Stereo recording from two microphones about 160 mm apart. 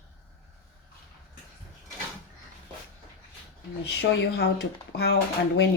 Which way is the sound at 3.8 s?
90° left.